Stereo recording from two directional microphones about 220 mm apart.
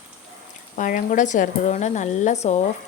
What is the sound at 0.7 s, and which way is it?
A woman's voice, 35° left (ahead or behind).